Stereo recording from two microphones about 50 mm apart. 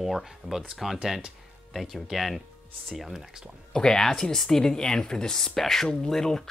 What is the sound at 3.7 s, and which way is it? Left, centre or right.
Speech, centre.